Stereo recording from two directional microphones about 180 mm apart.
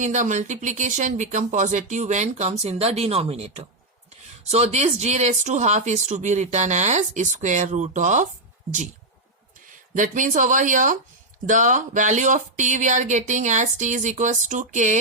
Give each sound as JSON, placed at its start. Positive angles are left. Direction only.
{"t": 0.0, "sound": "speech", "side_deg": -40}
{"t": 9.9, "sound": "speech", "side_deg": -45}